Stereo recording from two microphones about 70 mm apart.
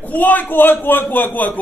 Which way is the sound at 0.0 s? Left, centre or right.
Left.